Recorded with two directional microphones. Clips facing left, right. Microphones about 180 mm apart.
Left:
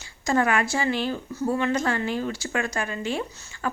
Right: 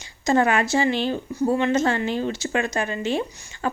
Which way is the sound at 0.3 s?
25° right (ahead or behind).